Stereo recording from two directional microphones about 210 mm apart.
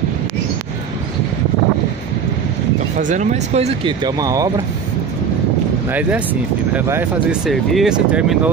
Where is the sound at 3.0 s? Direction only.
35° right (ahead or behind); by 4.5 s 15° right (ahead or behind).